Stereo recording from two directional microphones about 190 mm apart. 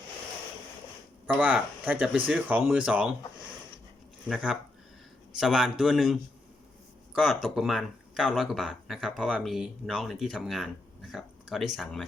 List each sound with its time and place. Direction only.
1.3 s speech: 5° right (ahead or behind)
4.3 s speech: 5° right (ahead or behind)